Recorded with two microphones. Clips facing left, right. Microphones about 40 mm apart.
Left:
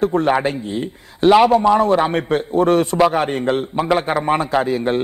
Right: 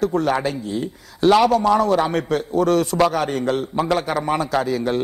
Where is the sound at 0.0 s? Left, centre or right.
Left.